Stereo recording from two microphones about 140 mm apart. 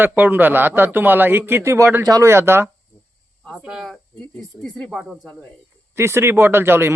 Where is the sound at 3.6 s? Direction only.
5° right (ahead or behind).